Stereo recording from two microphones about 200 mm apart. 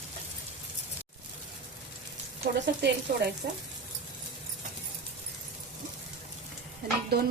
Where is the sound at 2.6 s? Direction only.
60° right (ahead or behind).